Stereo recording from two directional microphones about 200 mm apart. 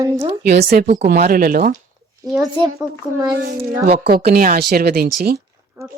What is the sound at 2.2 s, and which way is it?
Speech, centre (ahead or behind).